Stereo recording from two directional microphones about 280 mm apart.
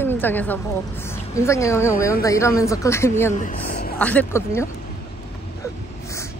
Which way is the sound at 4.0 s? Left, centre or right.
Centre.